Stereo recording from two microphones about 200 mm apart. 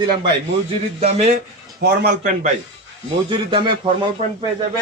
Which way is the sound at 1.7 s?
50° right (ahead or behind).